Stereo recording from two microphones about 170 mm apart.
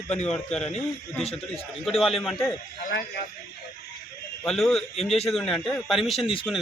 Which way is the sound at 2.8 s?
60° left (ahead or behind).